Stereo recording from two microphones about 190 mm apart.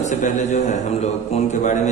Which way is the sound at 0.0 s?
40° left (ahead or behind).